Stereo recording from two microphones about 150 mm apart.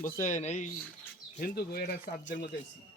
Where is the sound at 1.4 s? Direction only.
80° left.